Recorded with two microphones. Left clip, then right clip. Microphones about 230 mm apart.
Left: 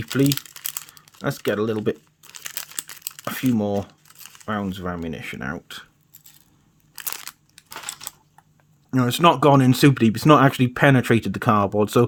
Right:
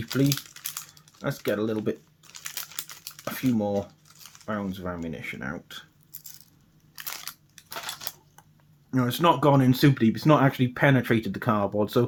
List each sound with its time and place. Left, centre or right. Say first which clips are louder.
0.0 s crumpling: left 5 dB; left
6.9 s crunch: left 3 dB; left
7.5 s typewriter: even; left
8.9 s speech: left 5 dB; left